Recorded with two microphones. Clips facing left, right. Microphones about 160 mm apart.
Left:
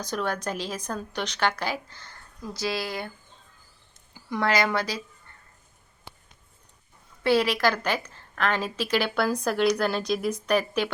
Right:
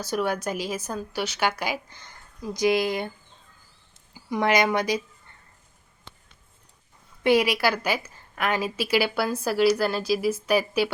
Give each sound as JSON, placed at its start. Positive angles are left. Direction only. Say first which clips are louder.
{"t": 0.0, "sound": "a woman's voice", "louder": "right 3 dB", "side_deg": -10}
{"t": 4.3, "sound": "a woman's voice", "louder": "right 2 dB", "side_deg": -15}
{"t": 7.3, "sound": "a woman's voice", "louder": "right 1 dB", "side_deg": -15}